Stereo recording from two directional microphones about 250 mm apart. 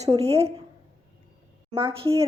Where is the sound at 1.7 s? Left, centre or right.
Centre.